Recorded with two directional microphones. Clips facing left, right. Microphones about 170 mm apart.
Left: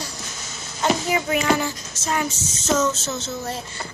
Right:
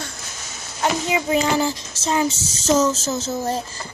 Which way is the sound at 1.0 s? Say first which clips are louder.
Right 1 dB; 20° right (ahead or behind).